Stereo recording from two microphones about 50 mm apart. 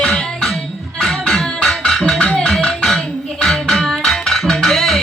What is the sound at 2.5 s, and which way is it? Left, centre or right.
Music, centre.